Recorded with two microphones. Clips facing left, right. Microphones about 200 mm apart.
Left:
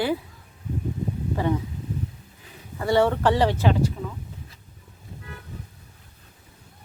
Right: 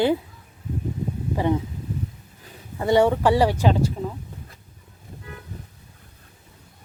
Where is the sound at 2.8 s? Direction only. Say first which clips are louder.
Right 2 dB; 15° right (ahead or behind).